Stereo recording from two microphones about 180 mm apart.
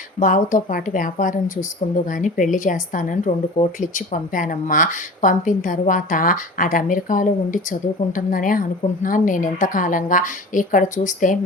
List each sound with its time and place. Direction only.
0.2 s a woman's voice: 45° left (ahead or behind)